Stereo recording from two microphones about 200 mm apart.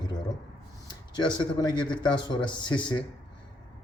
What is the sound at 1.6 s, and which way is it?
A man's voice, 20° left (ahead or behind).